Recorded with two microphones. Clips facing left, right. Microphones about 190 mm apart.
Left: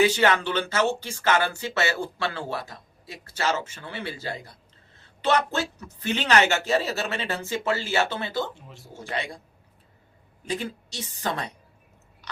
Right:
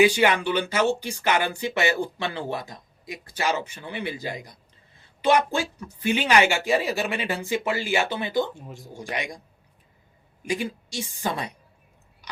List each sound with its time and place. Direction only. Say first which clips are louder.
0.0 s speech: right 2 dB; 15° right (ahead or behind)
8.5 s speech: right 6 dB; 45° right (ahead or behind)
8.8 s speech: even; 15° right (ahead or behind)
10.4 s speech: right 2 dB; 10° right (ahead or behind)